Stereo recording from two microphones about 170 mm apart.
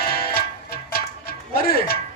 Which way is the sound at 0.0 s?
65° left (ahead or behind).